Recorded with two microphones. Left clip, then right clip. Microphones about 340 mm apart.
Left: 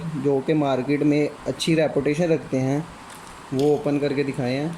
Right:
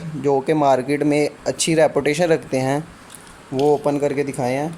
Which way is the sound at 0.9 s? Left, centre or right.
Right.